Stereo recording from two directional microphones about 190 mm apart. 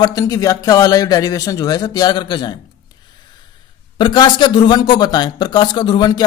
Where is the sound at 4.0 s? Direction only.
25° left (ahead or behind).